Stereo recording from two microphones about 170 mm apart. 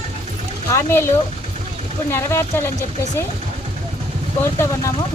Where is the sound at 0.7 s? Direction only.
15° left (ahead or behind).